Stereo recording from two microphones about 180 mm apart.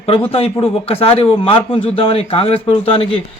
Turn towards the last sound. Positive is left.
turn(degrees=30)  # may be behind; listen again after turning